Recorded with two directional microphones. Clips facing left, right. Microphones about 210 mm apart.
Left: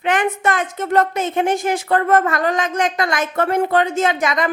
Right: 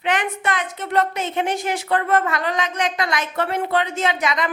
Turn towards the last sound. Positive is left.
turn(degrees=45)  # may be behind; listen again after turning